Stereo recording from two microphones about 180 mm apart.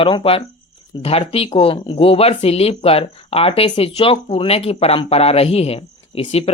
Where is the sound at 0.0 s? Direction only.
30° left (ahead or behind).